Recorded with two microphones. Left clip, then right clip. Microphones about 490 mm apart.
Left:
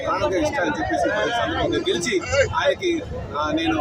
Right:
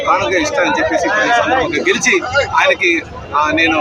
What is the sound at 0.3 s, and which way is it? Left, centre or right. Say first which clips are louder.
Speech: right 8 dB; left.